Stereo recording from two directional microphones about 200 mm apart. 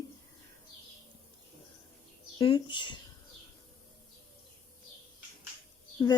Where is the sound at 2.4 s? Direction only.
25° left (ahead or behind).